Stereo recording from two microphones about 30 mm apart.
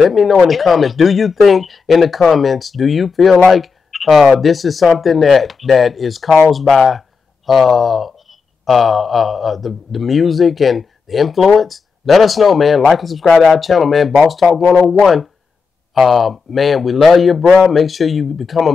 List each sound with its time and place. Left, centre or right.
0.0 s a man's voice: centre